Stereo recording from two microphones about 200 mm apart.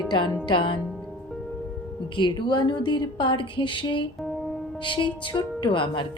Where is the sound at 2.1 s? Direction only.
25° left (ahead or behind).